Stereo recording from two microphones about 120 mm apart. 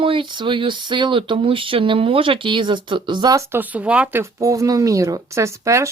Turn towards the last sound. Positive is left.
turn(degrees=-25)  # may be behind; listen again after turning